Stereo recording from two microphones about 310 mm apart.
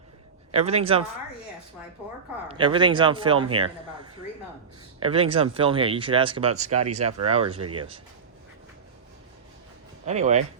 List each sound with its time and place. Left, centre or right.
0.5 s speech: centre
2.5 s speech: centre
4.9 s speech: centre
6.7 s speech: right
10.1 s speech: right